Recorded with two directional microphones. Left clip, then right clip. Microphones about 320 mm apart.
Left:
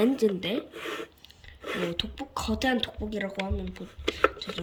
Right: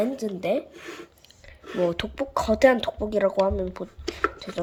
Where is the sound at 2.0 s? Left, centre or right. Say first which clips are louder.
Right 6 dB; centre.